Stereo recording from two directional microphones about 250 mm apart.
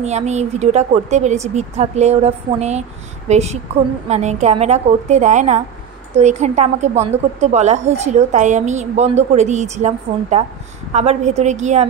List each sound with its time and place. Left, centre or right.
0.0 s a woman's voice: right